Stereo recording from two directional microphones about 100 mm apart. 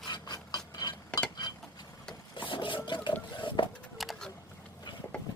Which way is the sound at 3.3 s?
55° left (ahead or behind).